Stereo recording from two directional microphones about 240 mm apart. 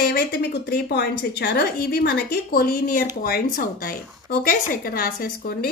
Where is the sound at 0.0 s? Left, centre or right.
Left.